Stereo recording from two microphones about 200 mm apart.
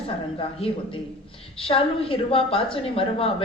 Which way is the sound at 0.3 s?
25° left (ahead or behind).